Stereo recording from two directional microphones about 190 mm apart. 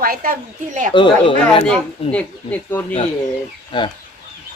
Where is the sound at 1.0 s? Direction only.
25° left (ahead or behind).